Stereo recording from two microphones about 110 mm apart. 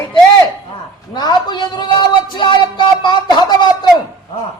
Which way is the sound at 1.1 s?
40° left (ahead or behind).